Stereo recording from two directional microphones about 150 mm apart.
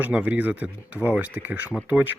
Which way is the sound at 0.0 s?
10° right (ahead or behind).